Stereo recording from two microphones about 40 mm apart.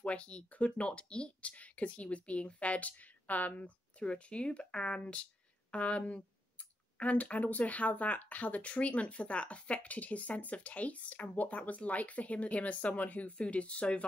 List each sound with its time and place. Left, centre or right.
0.0 s speech: left
0.5 s speech: left
4.0 s speech: left
13.4 s speech: left